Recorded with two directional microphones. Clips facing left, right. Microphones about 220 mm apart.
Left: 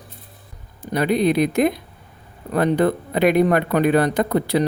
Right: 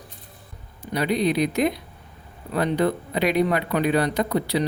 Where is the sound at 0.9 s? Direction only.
50° left (ahead or behind).